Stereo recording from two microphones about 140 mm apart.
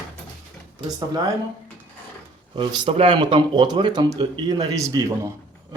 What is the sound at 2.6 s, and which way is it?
Speech, 35° right (ahead or behind).